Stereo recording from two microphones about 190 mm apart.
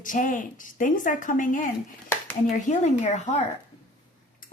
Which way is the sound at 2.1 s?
15° left (ahead or behind).